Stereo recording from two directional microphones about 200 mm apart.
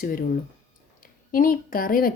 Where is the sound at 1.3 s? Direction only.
45° left (ahead or behind).